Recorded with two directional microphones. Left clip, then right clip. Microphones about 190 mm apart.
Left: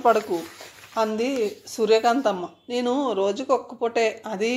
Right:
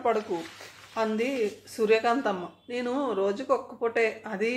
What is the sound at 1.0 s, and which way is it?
Speech, 30° left (ahead or behind).